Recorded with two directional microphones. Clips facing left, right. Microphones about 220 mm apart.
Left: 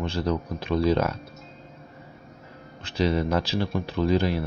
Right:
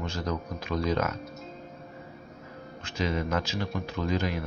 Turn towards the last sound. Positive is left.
turn(degrees=30)  # may be behind; listen again after turning